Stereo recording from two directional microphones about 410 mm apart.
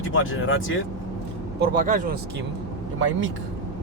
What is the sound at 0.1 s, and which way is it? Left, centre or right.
Speech, left.